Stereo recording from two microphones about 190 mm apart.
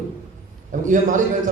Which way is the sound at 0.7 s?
45° right (ahead or behind).